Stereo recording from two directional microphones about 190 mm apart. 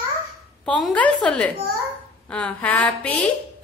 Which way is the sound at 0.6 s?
5° left (ahead or behind).